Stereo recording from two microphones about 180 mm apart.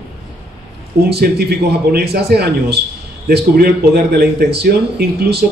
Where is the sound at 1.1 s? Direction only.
60° right (ahead or behind).